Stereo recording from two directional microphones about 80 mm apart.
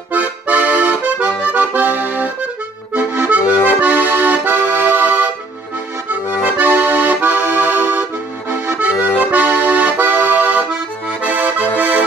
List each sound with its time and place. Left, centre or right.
0.1 s accordion: centre
6.6 s accordion: right